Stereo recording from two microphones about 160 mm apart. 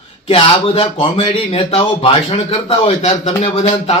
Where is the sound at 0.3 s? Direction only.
35° left (ahead or behind).